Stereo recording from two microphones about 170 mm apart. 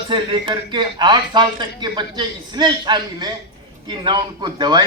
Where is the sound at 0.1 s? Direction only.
30° right (ahead or behind).